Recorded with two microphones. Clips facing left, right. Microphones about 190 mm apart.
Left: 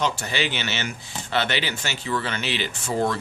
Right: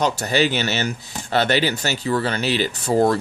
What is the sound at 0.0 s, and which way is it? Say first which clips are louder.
Speech: right 6 dB; 40° right (ahead or behind).